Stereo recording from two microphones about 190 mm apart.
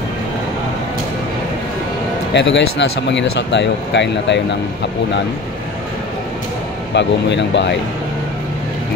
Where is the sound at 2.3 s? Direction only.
70° left (ahead or behind).